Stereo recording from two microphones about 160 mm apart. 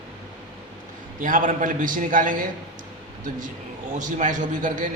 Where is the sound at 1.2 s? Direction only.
55° right (ahead or behind).